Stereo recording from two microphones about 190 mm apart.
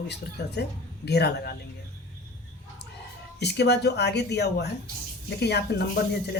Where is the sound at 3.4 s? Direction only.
60° left (ahead or behind).